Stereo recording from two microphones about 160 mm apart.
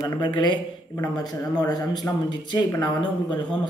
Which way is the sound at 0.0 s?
25° left (ahead or behind).